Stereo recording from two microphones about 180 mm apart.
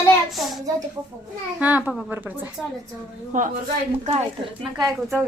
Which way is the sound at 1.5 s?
10° right (ahead or behind).